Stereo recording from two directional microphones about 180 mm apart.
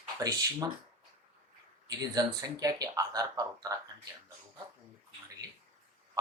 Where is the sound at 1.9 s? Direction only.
20° right (ahead or behind).